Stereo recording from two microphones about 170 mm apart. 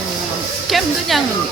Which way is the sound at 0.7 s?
Centre (ahead or behind).